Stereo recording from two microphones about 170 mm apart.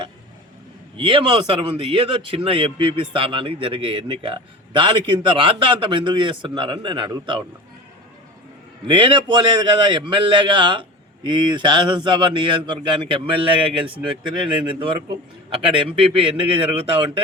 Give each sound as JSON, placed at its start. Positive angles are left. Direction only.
{"t": 0.9, "sound": "a man's voice", "side_deg": -30}
{"t": 8.9, "sound": "a man's voice", "side_deg": -30}